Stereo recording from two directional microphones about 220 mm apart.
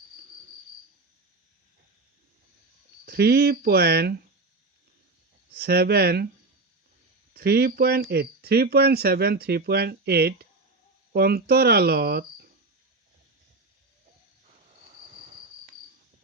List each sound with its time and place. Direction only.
3.1 s speech: 45° right (ahead or behind)
5.5 s speech: 45° right (ahead or behind)
7.3 s speech: 45° right (ahead or behind)